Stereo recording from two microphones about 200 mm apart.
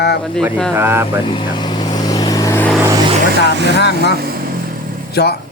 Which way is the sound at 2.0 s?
20° left (ahead or behind).